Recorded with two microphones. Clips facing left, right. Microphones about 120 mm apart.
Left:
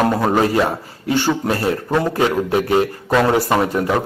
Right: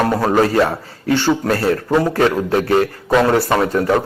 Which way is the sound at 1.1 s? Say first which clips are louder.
Right 2 dB; 15° left (ahead or behind).